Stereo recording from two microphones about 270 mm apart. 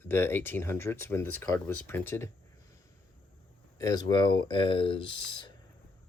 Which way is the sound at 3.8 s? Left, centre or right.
Centre.